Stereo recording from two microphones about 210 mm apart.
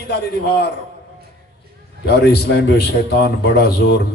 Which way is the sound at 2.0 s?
50° left (ahead or behind).